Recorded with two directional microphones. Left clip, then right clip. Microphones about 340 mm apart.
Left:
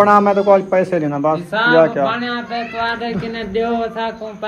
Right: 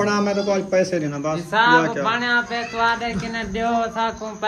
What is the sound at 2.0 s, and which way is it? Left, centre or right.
Speech, right.